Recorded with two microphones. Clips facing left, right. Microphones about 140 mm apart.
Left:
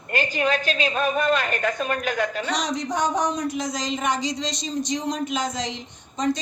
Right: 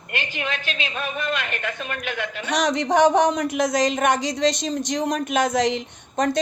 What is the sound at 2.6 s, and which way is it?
Speech, 75° right (ahead or behind).